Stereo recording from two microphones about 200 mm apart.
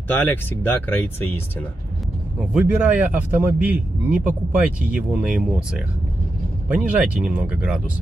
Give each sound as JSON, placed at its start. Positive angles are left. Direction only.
{"t": 0.1, "sound": "speech", "side_deg": 10}
{"t": 2.5, "sound": "a man's voice", "side_deg": -10}